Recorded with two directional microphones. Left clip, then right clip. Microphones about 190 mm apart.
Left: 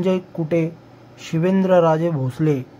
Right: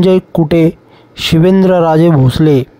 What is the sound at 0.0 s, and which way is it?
Speech, 50° right (ahead or behind).